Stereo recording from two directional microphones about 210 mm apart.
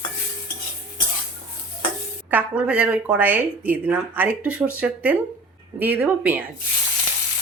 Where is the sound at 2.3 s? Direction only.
5° right (ahead or behind).